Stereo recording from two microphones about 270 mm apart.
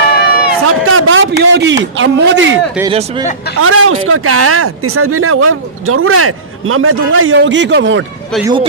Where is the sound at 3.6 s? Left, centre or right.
Right.